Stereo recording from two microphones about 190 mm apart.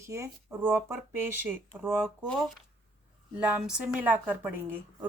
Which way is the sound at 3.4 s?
5° right (ahead or behind).